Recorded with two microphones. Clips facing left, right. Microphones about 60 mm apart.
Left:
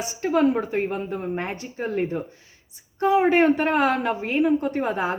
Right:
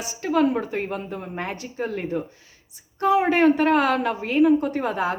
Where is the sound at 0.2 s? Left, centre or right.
Left.